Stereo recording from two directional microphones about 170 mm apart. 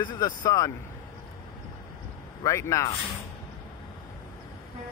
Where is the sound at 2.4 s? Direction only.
20° left (ahead or behind).